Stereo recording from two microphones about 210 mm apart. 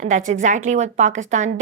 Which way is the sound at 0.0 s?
35° right (ahead or behind).